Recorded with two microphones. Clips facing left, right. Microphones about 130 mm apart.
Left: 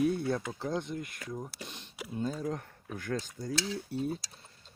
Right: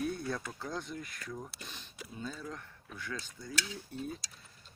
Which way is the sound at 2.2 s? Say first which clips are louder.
Left 8 dB; 40° left (ahead or behind).